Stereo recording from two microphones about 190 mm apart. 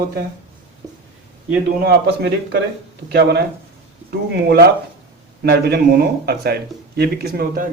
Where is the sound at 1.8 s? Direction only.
60° right (ahead or behind).